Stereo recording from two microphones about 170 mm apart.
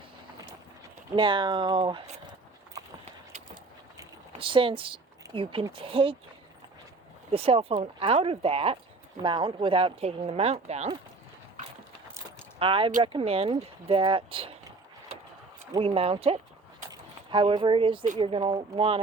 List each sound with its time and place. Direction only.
1.1 s speech: 30° right (ahead or behind)
4.4 s speech: 30° right (ahead or behind)
7.3 s speech: 35° right (ahead or behind)
12.5 s speech: 30° right (ahead or behind)
15.8 s speech: 35° right (ahead or behind)
16.9 s a sound: 30° right (ahead or behind)
18.2 s speech: 30° right (ahead or behind)